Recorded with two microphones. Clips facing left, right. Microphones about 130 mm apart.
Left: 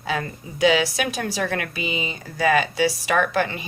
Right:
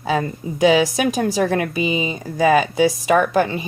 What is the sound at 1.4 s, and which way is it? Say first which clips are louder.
A woman's voice: right 7 dB; 25° right (ahead or behind).